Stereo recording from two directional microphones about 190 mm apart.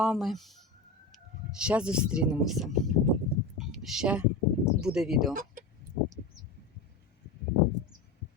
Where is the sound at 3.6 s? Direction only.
Centre (ahead or behind).